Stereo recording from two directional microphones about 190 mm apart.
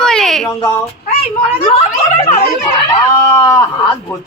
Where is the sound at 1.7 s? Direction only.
30° left (ahead or behind).